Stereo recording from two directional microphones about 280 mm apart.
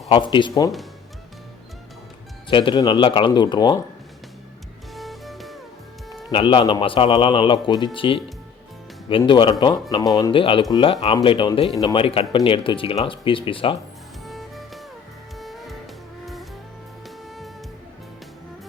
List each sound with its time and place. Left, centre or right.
0.1 s speech: centre
2.5 s speech: centre
4.9 s music: centre
6.3 s speech: centre
14.3 s music: centre